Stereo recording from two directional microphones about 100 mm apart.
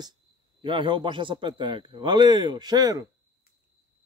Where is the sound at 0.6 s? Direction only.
55° right (ahead or behind).